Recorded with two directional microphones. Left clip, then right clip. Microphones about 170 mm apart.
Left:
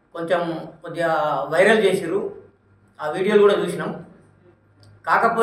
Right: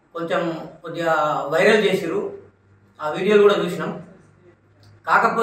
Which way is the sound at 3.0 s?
10° left (ahead or behind).